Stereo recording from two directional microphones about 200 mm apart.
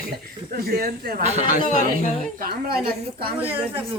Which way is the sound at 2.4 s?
50° right (ahead or behind).